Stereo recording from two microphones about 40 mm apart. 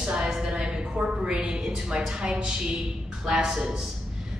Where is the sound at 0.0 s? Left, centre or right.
Right.